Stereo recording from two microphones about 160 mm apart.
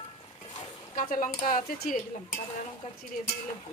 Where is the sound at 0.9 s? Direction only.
55° left (ahead or behind).